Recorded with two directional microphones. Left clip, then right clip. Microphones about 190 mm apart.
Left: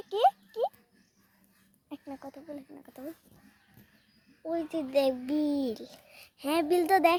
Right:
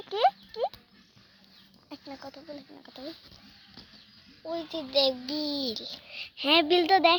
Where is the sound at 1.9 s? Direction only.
20° left (ahead or behind).